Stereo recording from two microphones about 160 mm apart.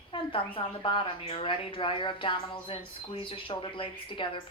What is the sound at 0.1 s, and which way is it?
Speech, 35° left (ahead or behind).